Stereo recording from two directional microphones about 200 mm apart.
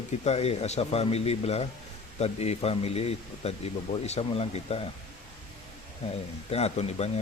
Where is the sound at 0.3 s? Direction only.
30° left (ahead or behind).